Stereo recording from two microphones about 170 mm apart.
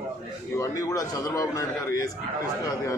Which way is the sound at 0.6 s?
20° left (ahead or behind).